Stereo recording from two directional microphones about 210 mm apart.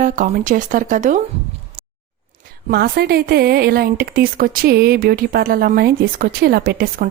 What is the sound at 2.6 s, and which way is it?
A woman's voice, 45° right (ahead or behind).